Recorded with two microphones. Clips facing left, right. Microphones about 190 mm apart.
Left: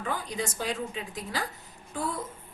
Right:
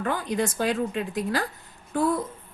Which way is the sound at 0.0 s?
60° right (ahead or behind).